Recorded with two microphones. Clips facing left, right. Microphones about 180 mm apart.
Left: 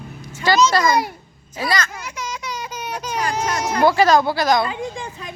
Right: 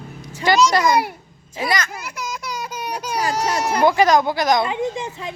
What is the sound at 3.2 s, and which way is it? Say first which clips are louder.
Baby cry: right 2 dB; 30° right (ahead or behind).